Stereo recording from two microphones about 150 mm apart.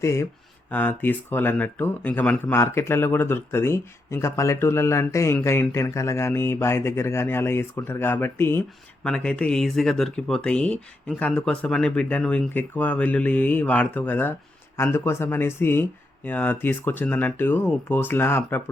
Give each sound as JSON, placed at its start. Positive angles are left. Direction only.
{"t": 0.0, "sound": "speech", "side_deg": 20}